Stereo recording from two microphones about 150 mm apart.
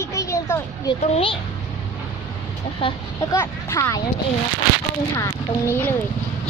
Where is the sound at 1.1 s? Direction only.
35° left (ahead or behind).